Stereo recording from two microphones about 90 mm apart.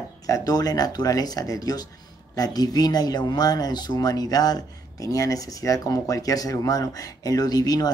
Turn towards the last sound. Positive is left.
turn(degrees=45)  # may be behind; listen again after turning